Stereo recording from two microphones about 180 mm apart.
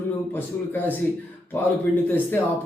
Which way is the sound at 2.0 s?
10° left (ahead or behind).